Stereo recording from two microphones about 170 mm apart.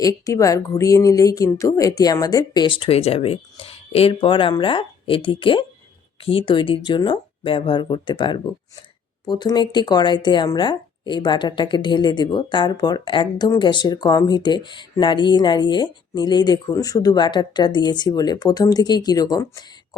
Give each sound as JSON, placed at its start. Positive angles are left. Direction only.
{"t": 0.0, "sound": "a woman's voice", "side_deg": 20}